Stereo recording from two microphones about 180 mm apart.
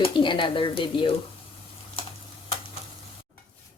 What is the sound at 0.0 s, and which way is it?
Speech, 25° left (ahead or behind).